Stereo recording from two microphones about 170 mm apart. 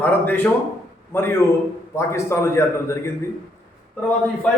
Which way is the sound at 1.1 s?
15° left (ahead or behind).